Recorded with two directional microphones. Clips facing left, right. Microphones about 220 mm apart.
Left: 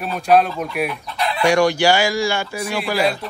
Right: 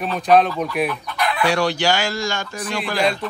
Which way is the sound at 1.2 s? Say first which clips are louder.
Even; 30° left (ahead or behind).